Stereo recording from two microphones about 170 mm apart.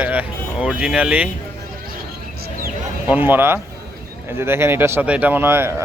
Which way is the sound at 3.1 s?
10° right (ahead or behind).